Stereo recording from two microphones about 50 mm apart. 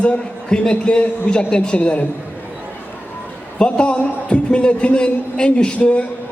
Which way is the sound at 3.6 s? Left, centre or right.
Left.